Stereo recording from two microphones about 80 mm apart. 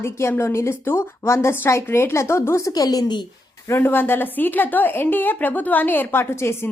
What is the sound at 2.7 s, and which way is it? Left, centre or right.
Speech, left.